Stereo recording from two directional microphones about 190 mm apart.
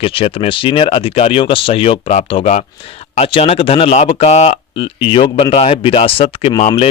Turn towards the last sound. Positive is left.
turn(degrees=30)  # may be behind; listen again after turning